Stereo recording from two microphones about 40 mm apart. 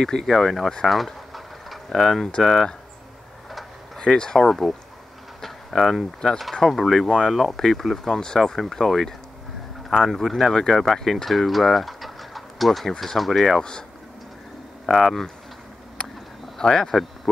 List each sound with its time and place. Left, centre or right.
0.0 s speech: centre
0.8 s boiling: centre
2.0 s speech: centre
3.4 s a sound: centre
4.0 s speech: centre
4.4 s speech: centre
5.4 s a sound: centre
6.2 s speech: centre
10.5 s speech: centre
14.9 s speech: centre
16.5 s speech: centre